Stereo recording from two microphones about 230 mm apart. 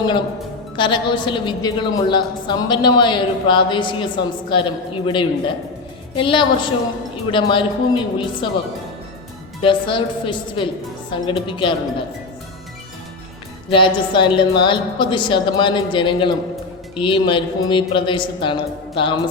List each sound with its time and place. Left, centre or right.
0.8 s a woman's voice: centre
9.6 s a woman's voice: left
13.7 s a woman's voice: left